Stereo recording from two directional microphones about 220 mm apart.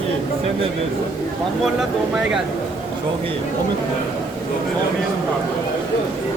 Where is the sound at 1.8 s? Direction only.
Centre (ahead or behind).